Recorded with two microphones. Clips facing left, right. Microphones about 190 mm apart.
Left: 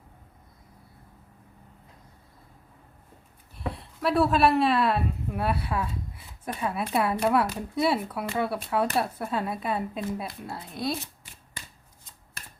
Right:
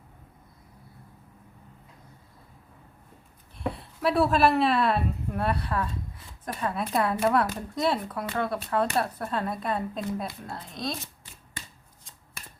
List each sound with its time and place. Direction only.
3.6 s speech: centre (ahead or behind)